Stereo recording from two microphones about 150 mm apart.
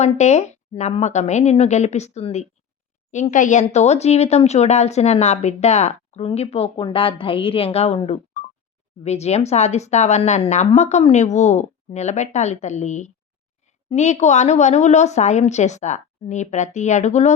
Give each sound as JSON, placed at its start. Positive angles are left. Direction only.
{"t": 0.0, "sound": "speech", "side_deg": 50}